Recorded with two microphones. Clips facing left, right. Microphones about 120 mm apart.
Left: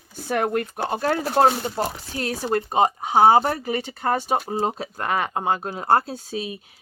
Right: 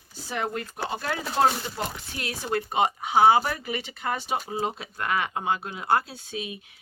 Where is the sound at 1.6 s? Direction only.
40° left (ahead or behind).